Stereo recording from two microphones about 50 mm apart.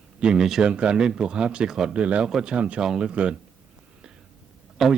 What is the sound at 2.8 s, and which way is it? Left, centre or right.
Speech, centre.